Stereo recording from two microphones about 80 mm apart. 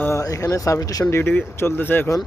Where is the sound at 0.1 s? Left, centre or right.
Left.